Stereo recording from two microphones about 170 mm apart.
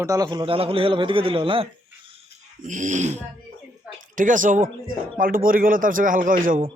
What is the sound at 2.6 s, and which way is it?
Dog, 50° right (ahead or behind).